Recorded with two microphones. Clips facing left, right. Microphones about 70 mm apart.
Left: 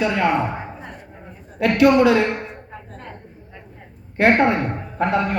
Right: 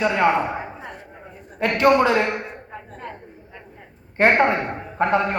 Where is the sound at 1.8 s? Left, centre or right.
Right.